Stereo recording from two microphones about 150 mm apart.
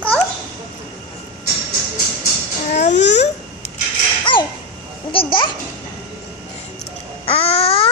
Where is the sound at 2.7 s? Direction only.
55° left (ahead or behind).